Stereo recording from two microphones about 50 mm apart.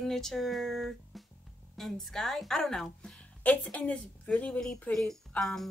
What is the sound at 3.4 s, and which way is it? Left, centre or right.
Speech, left.